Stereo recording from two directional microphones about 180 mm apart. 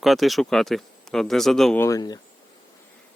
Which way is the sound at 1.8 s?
20° left (ahead or behind).